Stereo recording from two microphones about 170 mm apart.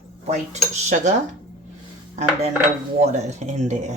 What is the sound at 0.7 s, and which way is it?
Speech, 45° right (ahead or behind).